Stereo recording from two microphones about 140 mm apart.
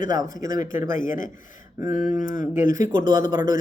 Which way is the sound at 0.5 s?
70° left (ahead or behind).